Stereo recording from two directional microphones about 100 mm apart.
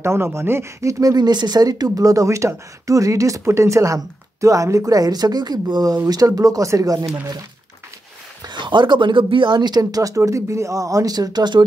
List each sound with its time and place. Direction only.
0.0 s speech: 25° right (ahead or behind)
8.5 s speech: 50° right (ahead or behind)